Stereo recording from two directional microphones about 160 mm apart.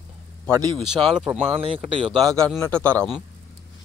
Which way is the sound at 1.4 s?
35° right (ahead or behind).